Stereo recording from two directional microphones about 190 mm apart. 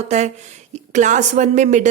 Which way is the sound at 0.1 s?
35° right (ahead or behind).